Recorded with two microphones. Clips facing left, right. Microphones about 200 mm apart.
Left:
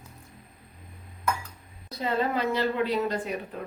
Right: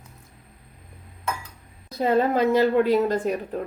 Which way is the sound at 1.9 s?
50° right (ahead or behind).